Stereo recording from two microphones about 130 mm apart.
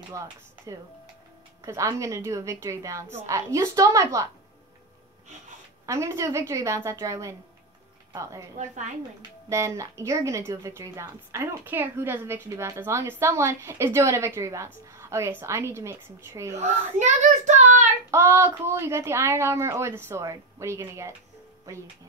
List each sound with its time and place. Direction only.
0.2 s a woman's voice: 25° right (ahead or behind)
5.9 s a woman's voice: 20° right (ahead or behind)
9.5 s a woman's voice: 25° right (ahead or behind)
16.5 s speech: 65° right (ahead or behind)
18.1 s a woman's voice: 20° right (ahead or behind)